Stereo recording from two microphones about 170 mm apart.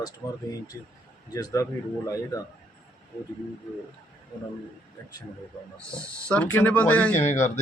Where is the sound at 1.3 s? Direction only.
20° left (ahead or behind).